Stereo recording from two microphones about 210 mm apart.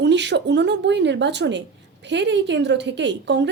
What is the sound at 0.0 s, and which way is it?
A woman's voice, 55° right (ahead or behind).